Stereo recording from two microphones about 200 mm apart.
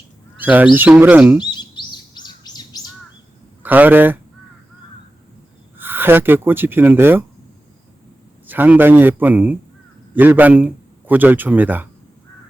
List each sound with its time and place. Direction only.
0.3 s a man's voice: 10° right (ahead or behind)
1.4 s bird vocalization: 20° left (ahead or behind)
3.6 s speech: 10° right (ahead or behind)
5.7 s speech: 10° right (ahead or behind)
8.4 s a man's voice: 10° right (ahead or behind)